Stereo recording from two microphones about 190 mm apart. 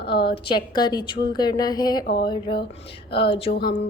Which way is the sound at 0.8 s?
20° left (ahead or behind).